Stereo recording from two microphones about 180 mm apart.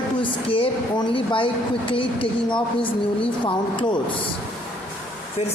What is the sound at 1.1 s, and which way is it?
Speech, 30° left (ahead or behind).